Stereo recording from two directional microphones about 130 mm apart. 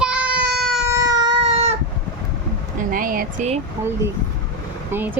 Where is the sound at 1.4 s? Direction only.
50° right (ahead or behind).